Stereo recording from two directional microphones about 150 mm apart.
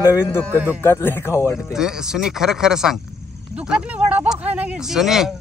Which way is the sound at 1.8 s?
5° right (ahead or behind).